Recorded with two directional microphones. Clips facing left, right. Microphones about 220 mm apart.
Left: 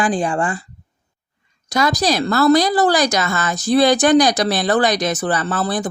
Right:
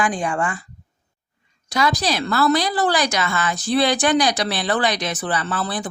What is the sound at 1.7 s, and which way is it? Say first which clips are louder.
A woman's voice: left 3 dB; 40° left (ahead or behind).